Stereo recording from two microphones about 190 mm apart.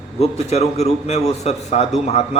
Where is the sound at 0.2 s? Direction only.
35° left (ahead or behind).